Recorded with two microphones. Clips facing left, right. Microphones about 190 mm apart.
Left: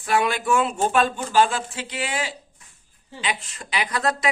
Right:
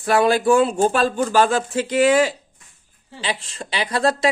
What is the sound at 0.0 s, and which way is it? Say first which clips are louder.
A woman's voice: right 6 dB; 35° right (ahead or behind).